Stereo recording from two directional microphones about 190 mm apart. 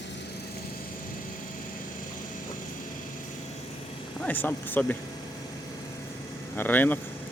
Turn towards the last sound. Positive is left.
turn(degrees=10)  # may be behind; listen again after turning